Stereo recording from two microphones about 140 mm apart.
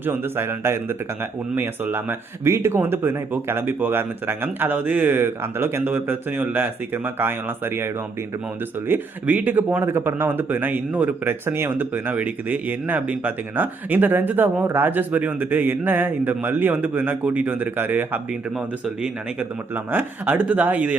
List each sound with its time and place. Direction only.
0.0 s speech: 15° right (ahead or behind)
8.9 s speech: 10° right (ahead or behind)